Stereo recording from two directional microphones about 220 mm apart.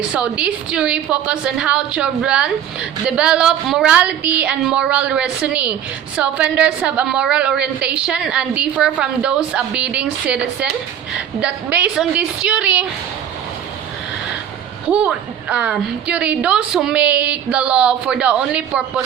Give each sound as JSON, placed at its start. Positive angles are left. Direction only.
{"t": 0.1, "sound": "a woman's voice", "side_deg": -5}
{"t": 14.8, "sound": "a woman's voice", "side_deg": -5}